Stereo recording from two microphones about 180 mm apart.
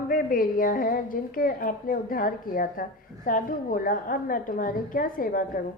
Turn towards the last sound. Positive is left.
turn(degrees=50)  # may be behind; listen again after turning